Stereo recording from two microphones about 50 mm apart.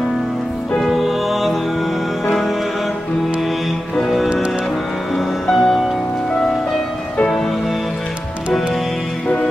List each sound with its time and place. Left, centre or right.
0.7 s music: centre
3.9 s music: centre
5.5 s music: centre